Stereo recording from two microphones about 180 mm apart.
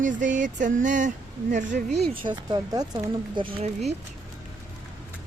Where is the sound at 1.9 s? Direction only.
Centre (ahead or behind).